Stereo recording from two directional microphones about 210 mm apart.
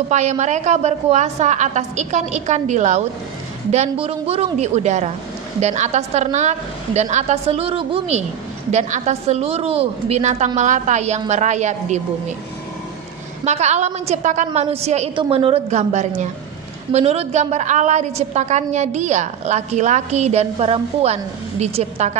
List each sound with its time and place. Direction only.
0.1 s a woman's voice: 35° right (ahead or behind)
13.4 s a woman's voice: 30° right (ahead or behind)